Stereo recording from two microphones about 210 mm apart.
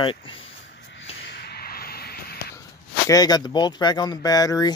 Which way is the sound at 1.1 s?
55° left (ahead or behind).